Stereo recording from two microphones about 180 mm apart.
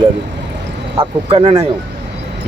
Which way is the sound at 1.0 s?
30° right (ahead or behind).